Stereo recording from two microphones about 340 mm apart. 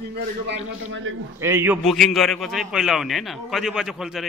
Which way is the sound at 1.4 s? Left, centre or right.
Centre.